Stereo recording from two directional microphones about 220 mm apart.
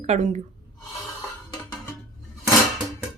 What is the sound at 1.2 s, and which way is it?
Music, 10° left (ahead or behind).